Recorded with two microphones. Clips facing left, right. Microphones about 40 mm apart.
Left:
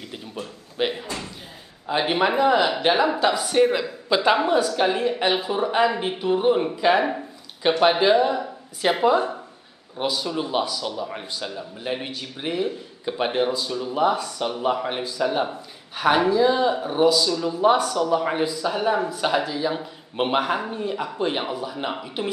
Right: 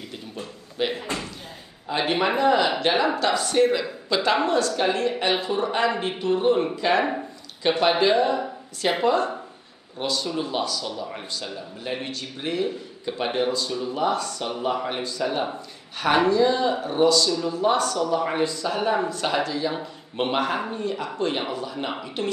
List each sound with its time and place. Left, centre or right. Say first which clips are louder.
0.7 s a man's voice: left 1 dB; centre